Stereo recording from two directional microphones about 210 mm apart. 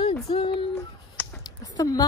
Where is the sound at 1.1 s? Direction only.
15° left (ahead or behind).